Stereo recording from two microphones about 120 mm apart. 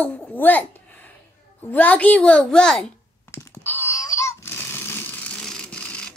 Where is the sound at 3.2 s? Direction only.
20° left (ahead or behind).